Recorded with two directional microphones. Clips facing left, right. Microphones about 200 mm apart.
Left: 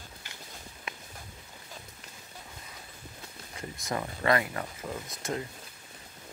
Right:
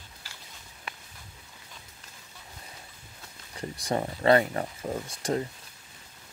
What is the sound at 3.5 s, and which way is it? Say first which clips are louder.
Speech: right 5 dB; 30° right (ahead or behind).